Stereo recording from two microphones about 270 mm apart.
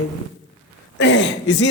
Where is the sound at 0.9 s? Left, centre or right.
Left.